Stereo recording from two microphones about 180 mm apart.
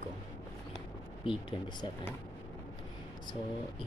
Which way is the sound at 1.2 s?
30° left (ahead or behind).